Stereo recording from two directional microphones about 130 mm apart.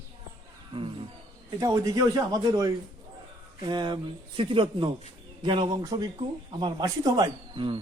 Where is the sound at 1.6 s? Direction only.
25° right (ahead or behind).